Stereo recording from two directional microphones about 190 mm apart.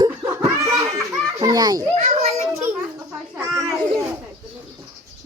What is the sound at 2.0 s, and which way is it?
Children playing, 35° right (ahead or behind).